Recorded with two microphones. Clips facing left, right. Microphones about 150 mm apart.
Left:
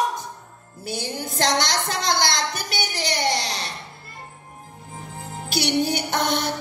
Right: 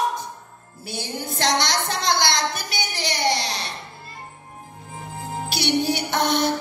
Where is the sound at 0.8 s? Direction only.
45° left (ahead or behind).